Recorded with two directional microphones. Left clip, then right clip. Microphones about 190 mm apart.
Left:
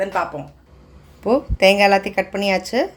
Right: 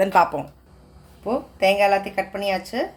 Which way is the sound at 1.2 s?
40° left (ahead or behind).